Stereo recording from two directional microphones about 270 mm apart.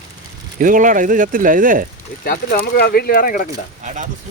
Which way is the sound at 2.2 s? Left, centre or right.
Left.